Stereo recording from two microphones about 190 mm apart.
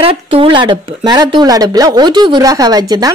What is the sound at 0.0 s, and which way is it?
Speech, 30° right (ahead or behind).